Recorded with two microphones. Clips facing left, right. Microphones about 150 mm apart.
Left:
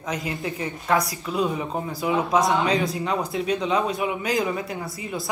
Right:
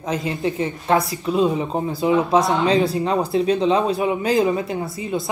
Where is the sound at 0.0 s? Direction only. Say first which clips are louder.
Right 6 dB; 25° right (ahead or behind).